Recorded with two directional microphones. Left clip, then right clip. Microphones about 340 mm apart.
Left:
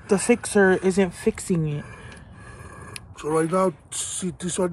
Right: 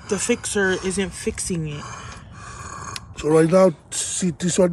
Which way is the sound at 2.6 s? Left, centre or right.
Centre.